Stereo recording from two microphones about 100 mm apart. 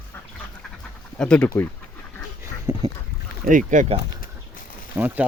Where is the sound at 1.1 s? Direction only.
10° left (ahead or behind).